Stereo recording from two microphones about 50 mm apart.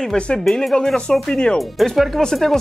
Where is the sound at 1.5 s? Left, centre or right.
Centre.